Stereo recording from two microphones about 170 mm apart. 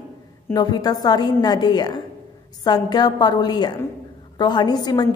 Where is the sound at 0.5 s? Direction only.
25° left (ahead or behind).